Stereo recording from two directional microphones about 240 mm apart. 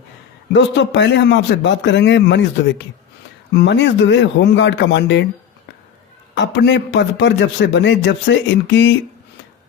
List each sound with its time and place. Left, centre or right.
0.5 s a man's voice: left
6.3 s a man's voice: left